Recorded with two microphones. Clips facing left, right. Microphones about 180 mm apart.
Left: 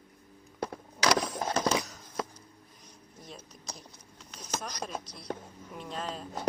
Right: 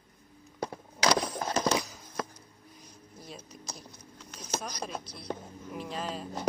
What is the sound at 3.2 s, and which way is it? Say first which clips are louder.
Speech: right 2 dB; centre (ahead or behind).